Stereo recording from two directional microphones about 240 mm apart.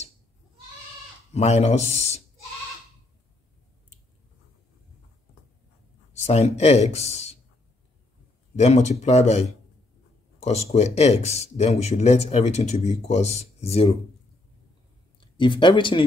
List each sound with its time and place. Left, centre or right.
1.3 s speech: left
6.1 s speech: left
8.5 s speech: left
15.1 s speech: centre